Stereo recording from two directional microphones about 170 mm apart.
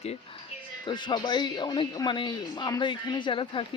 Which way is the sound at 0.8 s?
25° left (ahead or behind).